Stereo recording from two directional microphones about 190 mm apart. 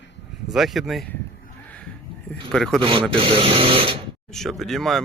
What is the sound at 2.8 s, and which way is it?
Speech, 25° right (ahead or behind).